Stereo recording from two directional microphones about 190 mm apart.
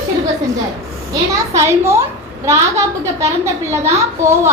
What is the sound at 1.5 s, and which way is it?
Speech, 15° right (ahead or behind).